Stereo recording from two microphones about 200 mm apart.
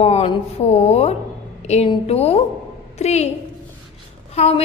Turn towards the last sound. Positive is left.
turn(degrees=30)  # may be behind; listen again after turning